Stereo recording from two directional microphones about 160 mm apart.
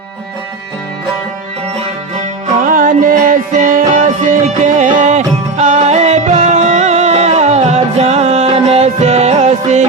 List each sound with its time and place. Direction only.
2.6 s music: 55° right (ahead or behind)